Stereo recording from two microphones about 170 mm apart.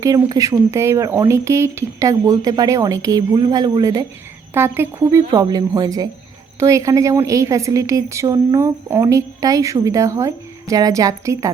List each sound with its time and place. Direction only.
0.0 s a woman's voice: 20° right (ahead or behind)